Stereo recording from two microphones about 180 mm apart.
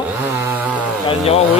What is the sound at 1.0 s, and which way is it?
Speech, 35° left (ahead or behind).